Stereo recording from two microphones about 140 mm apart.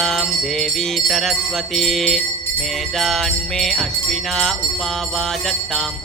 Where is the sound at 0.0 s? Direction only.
Centre (ahead or behind).